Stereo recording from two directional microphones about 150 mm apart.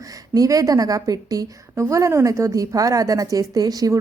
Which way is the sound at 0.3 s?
25° right (ahead or behind).